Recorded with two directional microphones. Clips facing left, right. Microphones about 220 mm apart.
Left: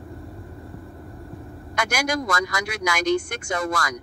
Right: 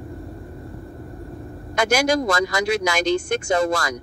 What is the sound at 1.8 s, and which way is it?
Speech, 25° right (ahead or behind).